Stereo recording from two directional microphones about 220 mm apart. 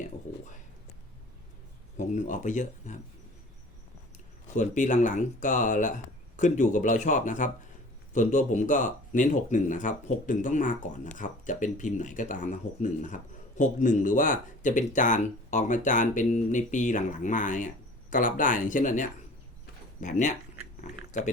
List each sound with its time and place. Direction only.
2.0 s speech: 35° left (ahead or behind)
4.4 s speech: 35° left (ahead or behind)